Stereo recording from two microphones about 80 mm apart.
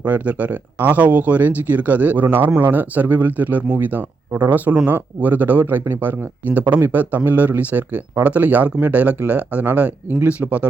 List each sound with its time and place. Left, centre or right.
0.0 s speech: centre